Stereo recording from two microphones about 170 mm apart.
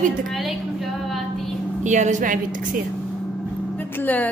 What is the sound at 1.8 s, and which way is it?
Speech, 45° right (ahead or behind).